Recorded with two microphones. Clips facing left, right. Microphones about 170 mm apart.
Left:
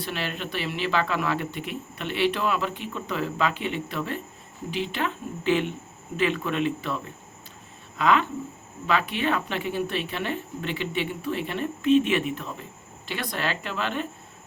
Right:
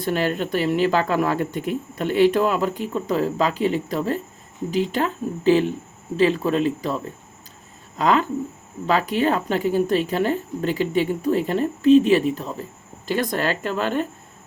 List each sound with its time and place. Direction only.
0.0 s speech: 45° right (ahead or behind)